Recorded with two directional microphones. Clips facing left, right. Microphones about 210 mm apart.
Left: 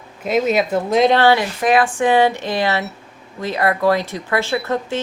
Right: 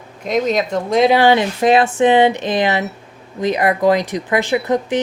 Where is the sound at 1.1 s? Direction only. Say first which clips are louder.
Right 2 dB; 15° right (ahead or behind).